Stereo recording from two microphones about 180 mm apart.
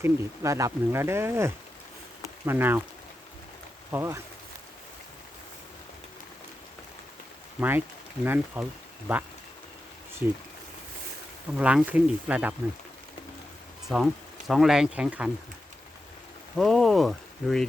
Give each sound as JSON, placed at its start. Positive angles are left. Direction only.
{"t": 0.0, "sound": "speech", "side_deg": -15}
{"t": 3.9, "sound": "speech", "side_deg": -15}
{"t": 7.6, "sound": "speech", "side_deg": -10}
{"t": 10.2, "sound": "speech", "side_deg": -10}
{"t": 11.5, "sound": "speech", "side_deg": -5}
{"t": 13.8, "sound": "speech", "side_deg": 0}
{"t": 16.6, "sound": "speech", "side_deg": 0}